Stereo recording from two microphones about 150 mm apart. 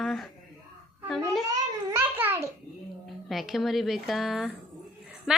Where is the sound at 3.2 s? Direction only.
Centre (ahead or behind).